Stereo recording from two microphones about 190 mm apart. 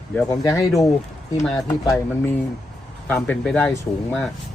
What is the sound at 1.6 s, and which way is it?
Speech, 15° left (ahead or behind).